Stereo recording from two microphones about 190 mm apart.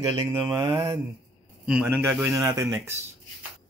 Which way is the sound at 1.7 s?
10° right (ahead or behind).